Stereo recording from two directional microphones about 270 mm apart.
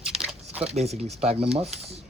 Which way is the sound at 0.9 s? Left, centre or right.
Right.